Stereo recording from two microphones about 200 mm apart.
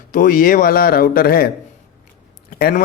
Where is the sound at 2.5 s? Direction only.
50° left (ahead or behind).